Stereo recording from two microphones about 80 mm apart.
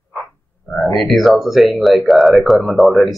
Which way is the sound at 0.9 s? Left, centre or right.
Centre.